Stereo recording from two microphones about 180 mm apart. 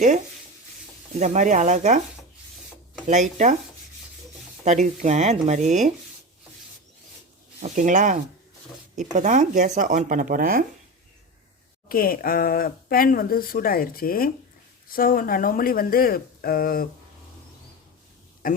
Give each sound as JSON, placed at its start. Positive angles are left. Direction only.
{"t": 1.2, "sound": "speech", "side_deg": -40}
{"t": 3.1, "sound": "speech", "side_deg": -40}
{"t": 4.6, "sound": "speech", "side_deg": -40}
{"t": 7.6, "sound": "speech", "side_deg": -45}
{"t": 11.9, "sound": "speech", "side_deg": 55}
{"t": 18.4, "sound": "speech", "side_deg": 50}